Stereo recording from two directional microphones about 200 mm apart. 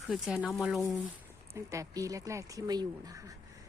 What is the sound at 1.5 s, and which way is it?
Speech, 15° right (ahead or behind).